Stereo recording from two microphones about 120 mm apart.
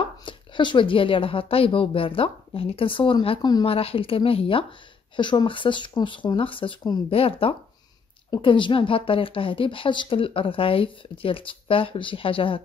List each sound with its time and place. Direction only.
0.0 s a woman's voice: 45° left (ahead or behind)
3.6 s a woman's voice: 50° left (ahead or behind)